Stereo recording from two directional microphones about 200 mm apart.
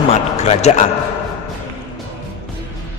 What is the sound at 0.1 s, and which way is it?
Speech, 30° left (ahead or behind).